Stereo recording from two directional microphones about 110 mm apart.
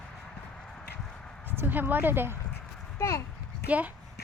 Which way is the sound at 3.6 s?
15° right (ahead or behind).